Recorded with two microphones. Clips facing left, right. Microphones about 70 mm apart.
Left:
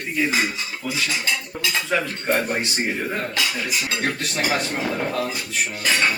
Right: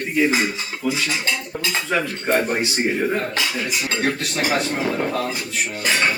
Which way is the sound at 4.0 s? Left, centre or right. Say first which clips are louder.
Right 2 dB; centre.